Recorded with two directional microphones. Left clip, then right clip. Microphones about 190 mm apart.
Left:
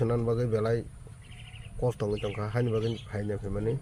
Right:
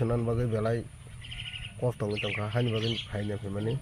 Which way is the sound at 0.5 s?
25° left (ahead or behind).